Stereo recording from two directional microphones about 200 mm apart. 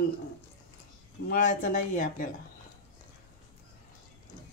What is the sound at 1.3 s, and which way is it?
Speech, 40° left (ahead or behind).